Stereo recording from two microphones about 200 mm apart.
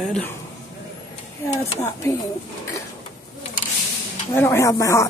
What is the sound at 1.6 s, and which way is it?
Speech, 15° left (ahead or behind).